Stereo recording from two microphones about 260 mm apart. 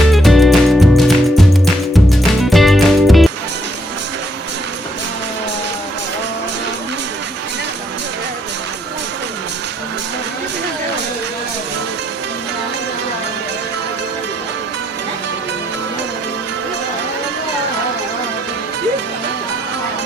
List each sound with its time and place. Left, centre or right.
0.1 s music: centre